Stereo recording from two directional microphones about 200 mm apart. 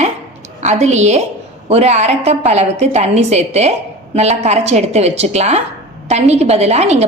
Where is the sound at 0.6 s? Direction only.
35° right (ahead or behind).